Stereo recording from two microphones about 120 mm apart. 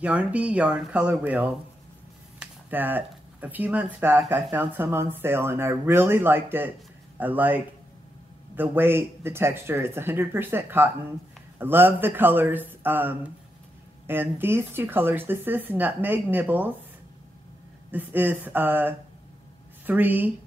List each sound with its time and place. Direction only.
0.0 s speech: 10° right (ahead or behind)
17.9 s speech: 15° right (ahead or behind)